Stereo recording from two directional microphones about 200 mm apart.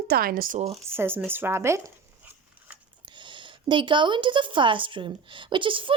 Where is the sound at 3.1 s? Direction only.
25° right (ahead or behind).